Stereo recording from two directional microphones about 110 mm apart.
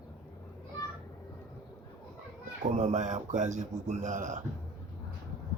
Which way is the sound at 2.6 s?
90° right.